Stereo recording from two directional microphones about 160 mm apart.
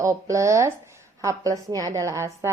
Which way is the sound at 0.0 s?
20° right (ahead or behind).